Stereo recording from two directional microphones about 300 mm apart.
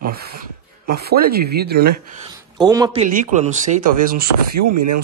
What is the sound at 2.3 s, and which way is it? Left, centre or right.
Speech, centre.